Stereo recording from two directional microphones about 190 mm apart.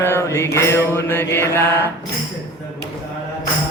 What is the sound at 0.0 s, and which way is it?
Mantra, 10° left (ahead or behind).